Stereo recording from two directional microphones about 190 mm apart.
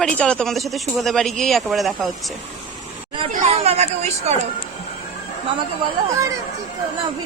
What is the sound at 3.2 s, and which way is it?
Speech, 30° right (ahead or behind).